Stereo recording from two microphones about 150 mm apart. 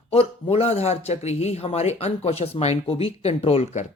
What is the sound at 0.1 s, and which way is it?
Speech, 40° left (ahead or behind).